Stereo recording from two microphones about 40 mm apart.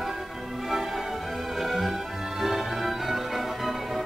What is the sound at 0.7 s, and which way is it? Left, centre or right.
Music, centre.